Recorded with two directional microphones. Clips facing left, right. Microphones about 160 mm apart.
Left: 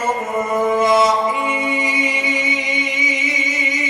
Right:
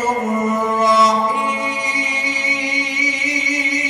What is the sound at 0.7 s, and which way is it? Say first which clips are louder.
Music: left 1 dB; 55° left (ahead or behind).